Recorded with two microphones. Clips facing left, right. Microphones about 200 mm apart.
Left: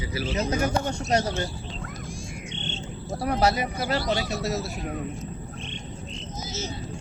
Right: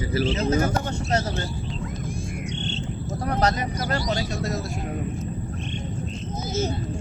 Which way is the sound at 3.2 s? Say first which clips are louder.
Left 1 dB; 10° left (ahead or behind).